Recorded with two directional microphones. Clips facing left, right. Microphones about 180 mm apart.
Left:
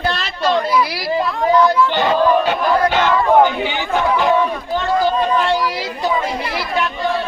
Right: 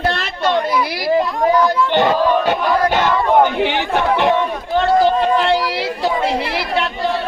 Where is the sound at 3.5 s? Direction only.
65° right (ahead or behind).